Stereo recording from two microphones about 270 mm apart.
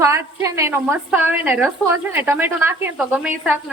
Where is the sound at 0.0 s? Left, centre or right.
Centre.